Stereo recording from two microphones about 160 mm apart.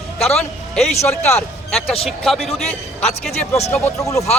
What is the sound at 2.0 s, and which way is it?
Speech, centre (ahead or behind).